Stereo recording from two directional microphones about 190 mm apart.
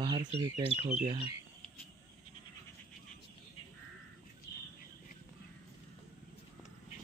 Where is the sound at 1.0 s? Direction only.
25° right (ahead or behind).